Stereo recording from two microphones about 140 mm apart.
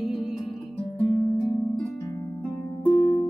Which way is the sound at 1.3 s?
25° left (ahead or behind).